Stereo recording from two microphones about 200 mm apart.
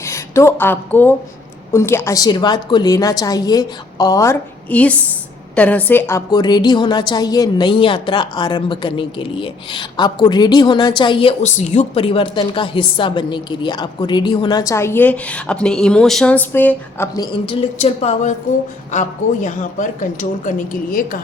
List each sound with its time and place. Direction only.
0.0 s a woman's voice: 15° left (ahead or behind)
17.4 s speech: 30° left (ahead or behind)